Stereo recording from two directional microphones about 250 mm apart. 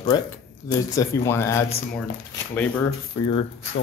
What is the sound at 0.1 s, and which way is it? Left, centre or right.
Speech, centre.